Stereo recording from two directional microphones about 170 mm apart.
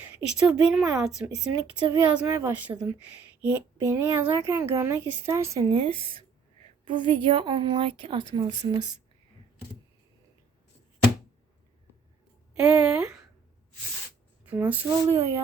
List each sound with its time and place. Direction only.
0.3 s a woman's voice: 5° right (ahead or behind)
5.7 s a woman's voice: 30° right (ahead or behind)
12.5 s a woman's voice: 5° right (ahead or behind)
14.4 s a woman's voice: 10° right (ahead or behind)